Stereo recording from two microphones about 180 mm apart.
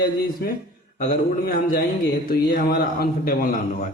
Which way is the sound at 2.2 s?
55° left (ahead or behind).